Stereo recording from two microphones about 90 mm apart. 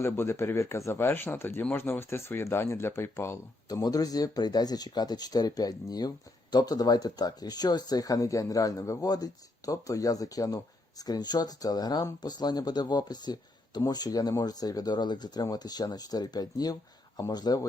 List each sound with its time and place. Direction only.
0.0 s speech: 30° left (ahead or behind)
3.7 s speech: 45° left (ahead or behind)